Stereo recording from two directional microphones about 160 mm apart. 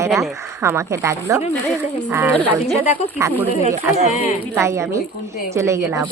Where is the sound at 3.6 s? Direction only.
45° right (ahead or behind).